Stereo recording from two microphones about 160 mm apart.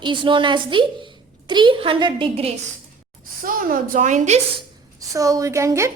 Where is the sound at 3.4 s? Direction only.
60° right (ahead or behind).